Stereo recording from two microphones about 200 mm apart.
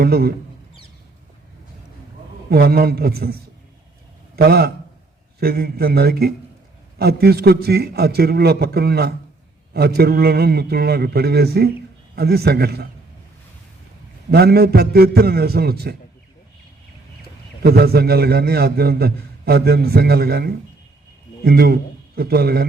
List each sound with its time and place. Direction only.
0.0 s a man's voice: 50° right (ahead or behind)
2.5 s a man's voice: 50° right (ahead or behind)
4.4 s a man's voice: 50° right (ahead or behind)
14.3 s a man's voice: 50° right (ahead or behind)
17.6 s a man's voice: 50° right (ahead or behind)